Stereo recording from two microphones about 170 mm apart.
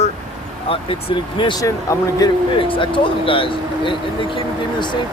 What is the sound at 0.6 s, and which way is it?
Speech, 30° left (ahead or behind).